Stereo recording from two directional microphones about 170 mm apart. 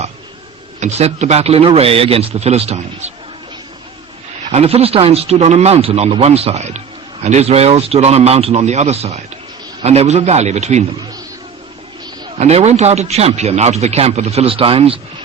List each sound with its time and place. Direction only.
0.8 s speech: 40° right (ahead or behind)
4.5 s speech: 35° right (ahead or behind)
12.4 s speech: 40° right (ahead or behind)